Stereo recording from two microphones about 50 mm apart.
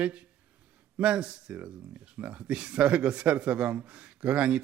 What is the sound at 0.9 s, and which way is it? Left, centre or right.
A man's voice, right.